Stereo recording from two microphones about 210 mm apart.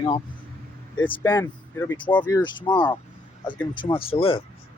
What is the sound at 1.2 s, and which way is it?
Speech, 10° left (ahead or behind).